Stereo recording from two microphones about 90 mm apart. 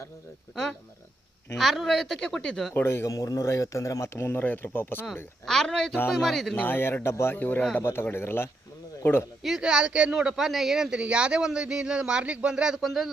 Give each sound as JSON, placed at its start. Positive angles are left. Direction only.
{"t": 0.5, "sound": "a woman's voice", "side_deg": 5}
{"t": 2.7, "sound": "speech", "side_deg": 30}
{"t": 5.5, "sound": "a woman's voice", "side_deg": 5}
{"t": 6.6, "sound": "speech", "side_deg": 25}
{"t": 9.4, "sound": "speech", "side_deg": -5}